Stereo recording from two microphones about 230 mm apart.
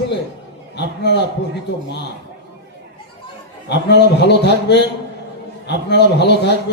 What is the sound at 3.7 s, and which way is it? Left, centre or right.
A man's voice, left.